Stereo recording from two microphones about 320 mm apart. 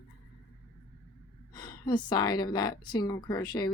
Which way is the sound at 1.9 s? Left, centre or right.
Centre.